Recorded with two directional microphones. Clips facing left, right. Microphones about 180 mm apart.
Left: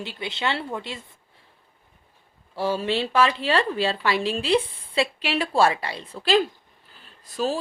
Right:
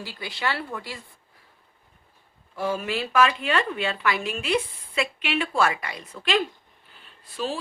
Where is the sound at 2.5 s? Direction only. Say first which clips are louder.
Left 3 dB; 30° left (ahead or behind).